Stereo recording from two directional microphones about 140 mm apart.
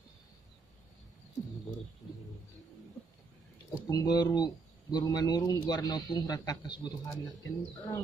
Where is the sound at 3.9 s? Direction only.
30° left (ahead or behind).